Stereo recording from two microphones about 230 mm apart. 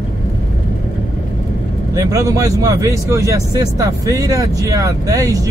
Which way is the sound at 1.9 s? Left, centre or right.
Centre.